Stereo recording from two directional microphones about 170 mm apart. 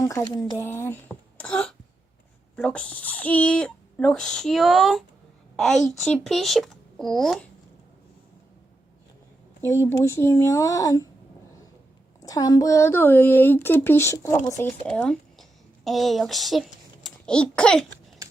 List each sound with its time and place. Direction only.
0.0 s speech: 15° left (ahead or behind); by 7.4 s centre (ahead or behind)
9.6 s speech: 15° left (ahead or behind)
12.2 s speech: 20° left (ahead or behind)
14.8 s a woman's voice: 5° left (ahead or behind)